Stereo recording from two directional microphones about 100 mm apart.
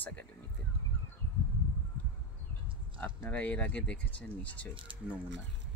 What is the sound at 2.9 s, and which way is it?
Speech, 25° left (ahead or behind).